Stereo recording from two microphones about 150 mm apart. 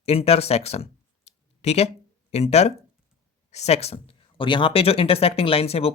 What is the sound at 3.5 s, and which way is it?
Speech, 45° left (ahead or behind).